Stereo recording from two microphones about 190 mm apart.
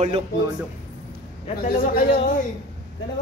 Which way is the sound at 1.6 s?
45° left (ahead or behind).